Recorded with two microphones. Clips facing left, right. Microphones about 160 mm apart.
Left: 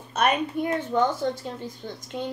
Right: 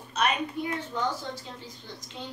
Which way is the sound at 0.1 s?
50° left (ahead or behind).